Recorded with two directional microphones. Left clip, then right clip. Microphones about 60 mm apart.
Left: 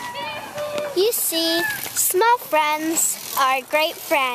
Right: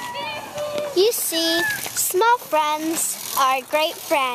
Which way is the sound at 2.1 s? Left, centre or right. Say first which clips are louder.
Even; centre.